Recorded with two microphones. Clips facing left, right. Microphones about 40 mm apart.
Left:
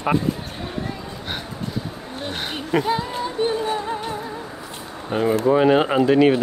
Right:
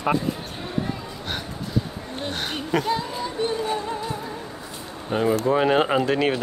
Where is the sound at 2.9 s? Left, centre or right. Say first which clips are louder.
Left 2 dB; centre.